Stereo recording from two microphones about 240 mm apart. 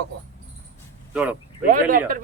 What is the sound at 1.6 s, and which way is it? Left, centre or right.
Speech, right.